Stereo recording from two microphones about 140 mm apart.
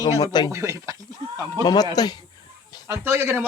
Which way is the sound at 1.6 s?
30° left (ahead or behind).